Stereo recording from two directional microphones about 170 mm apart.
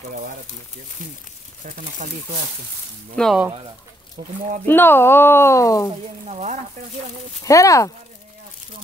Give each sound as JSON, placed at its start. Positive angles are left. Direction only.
{"t": 2.0, "sound": "speech", "side_deg": -50}
{"t": 3.2, "sound": "speech", "side_deg": 0}
{"t": 4.6, "sound": "speech", "side_deg": 10}
{"t": 6.2, "sound": "speech", "side_deg": -40}
{"t": 7.4, "sound": "speech", "side_deg": 20}